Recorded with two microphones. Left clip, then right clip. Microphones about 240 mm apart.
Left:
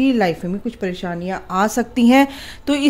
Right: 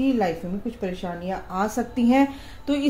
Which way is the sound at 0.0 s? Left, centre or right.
Left.